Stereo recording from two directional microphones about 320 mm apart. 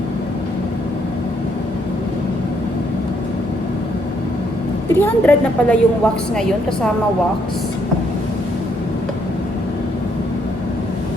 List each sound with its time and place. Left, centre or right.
4.9 s a woman's voice: centre